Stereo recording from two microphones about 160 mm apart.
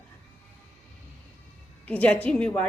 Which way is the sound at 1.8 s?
10° left (ahead or behind).